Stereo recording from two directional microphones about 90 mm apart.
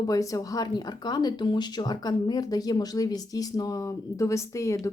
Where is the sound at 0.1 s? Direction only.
40° left (ahead or behind).